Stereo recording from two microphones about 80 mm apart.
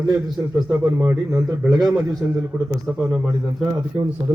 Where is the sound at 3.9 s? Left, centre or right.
Right.